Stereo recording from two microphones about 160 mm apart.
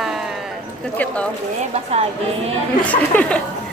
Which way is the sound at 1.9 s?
40° right (ahead or behind).